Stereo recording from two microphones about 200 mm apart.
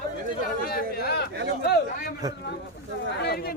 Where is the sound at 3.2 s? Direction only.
50° left (ahead or behind).